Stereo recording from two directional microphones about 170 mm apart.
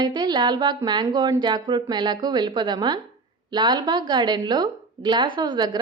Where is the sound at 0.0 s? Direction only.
25° right (ahead or behind).